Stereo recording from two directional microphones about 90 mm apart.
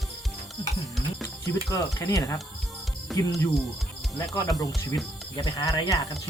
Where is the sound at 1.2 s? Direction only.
35° left (ahead or behind).